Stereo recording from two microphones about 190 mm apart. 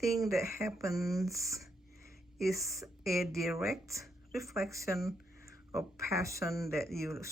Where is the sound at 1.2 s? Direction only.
15° right (ahead or behind).